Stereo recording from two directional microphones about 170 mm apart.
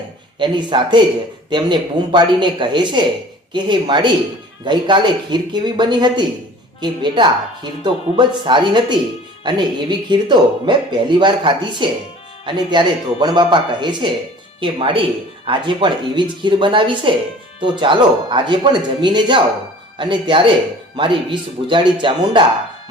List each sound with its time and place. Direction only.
0.3 s speech: 25° right (ahead or behind)